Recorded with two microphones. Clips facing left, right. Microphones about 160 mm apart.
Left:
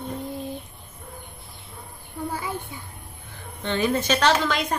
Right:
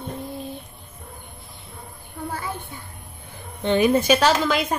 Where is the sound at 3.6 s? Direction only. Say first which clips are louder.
Right 6 dB; 15° right (ahead or behind).